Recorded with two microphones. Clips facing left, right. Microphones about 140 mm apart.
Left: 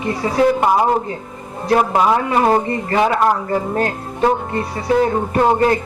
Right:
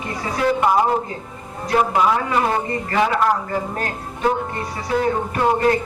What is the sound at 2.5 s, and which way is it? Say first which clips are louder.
Speech: left 6 dB; 35° left (ahead or behind).